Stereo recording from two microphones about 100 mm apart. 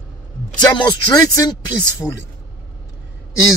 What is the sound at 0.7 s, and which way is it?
Speech, 45° left (ahead or behind).